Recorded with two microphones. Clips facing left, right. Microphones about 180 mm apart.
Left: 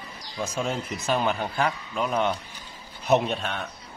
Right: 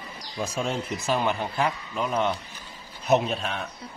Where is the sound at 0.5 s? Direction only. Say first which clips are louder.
Even; centre (ahead or behind).